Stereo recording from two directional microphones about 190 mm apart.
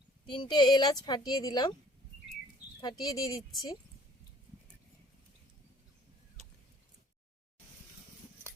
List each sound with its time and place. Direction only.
0.3 s a woman's voice: 25° left (ahead or behind)
2.8 s a woman's voice: 20° left (ahead or behind)